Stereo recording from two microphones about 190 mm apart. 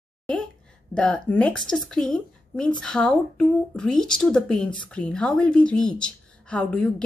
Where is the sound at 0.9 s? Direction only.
5° left (ahead or behind).